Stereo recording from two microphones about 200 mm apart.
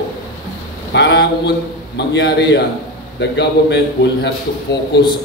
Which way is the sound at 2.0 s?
60° left (ahead or behind).